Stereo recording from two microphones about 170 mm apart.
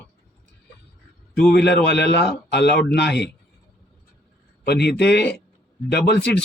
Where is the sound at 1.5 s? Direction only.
75° left (ahead or behind).